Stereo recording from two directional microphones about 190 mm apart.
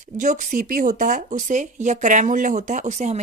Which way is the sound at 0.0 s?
45° right (ahead or behind).